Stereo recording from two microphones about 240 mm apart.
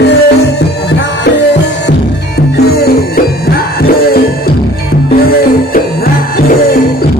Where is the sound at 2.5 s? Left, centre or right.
Left.